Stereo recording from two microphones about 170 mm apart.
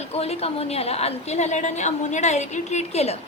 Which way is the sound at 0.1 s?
35° left (ahead or behind).